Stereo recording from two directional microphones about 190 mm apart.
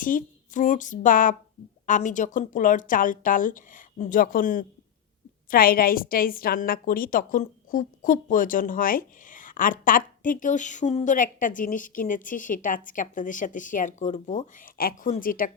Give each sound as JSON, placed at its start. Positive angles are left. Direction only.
{"t": 0.0, "sound": "a woman's voice", "side_deg": 45}